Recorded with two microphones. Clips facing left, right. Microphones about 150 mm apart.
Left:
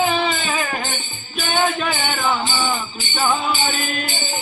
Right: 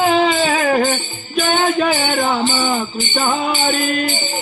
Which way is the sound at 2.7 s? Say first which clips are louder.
Right 6 dB; 50° right (ahead or behind).